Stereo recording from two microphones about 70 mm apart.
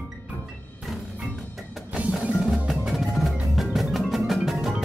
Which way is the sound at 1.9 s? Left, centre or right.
Centre.